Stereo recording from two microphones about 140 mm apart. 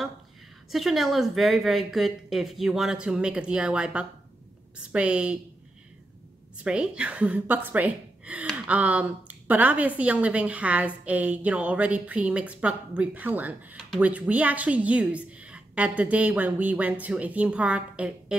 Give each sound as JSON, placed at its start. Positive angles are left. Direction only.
{"t": 0.7, "sound": "a woman's voice", "side_deg": 0}
{"t": 6.6, "sound": "speech", "side_deg": -10}